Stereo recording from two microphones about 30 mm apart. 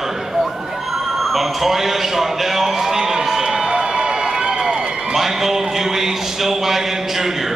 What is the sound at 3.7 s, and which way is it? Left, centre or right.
Run, right.